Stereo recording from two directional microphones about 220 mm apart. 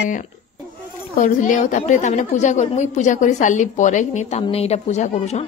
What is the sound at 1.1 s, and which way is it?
A woman's voice, 35° left (ahead or behind).